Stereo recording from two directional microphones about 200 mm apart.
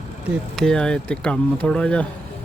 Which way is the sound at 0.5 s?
5° left (ahead or behind).